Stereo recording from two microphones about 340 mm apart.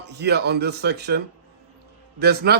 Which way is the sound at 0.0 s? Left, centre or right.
Right.